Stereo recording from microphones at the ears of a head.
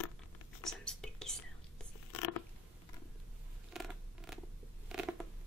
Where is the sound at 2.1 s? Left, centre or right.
Left.